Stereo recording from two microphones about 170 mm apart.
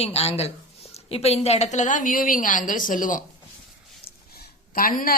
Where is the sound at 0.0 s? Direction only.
35° left (ahead or behind).